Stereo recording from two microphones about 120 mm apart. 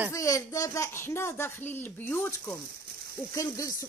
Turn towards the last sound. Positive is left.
turn(degrees=25)  # may be behind; listen again after turning